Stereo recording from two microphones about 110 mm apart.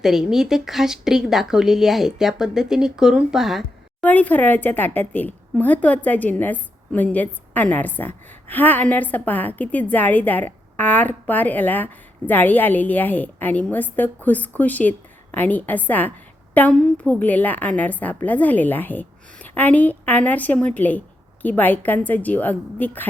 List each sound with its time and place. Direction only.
0.0 s speech: 5° right (ahead or behind)
4.0 s a woman's voice: 15° left (ahead or behind)